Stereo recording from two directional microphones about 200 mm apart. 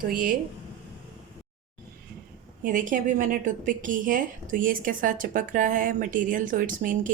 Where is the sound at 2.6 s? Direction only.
40° right (ahead or behind).